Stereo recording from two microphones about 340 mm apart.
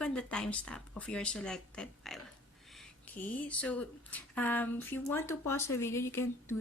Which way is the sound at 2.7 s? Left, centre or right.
Centre.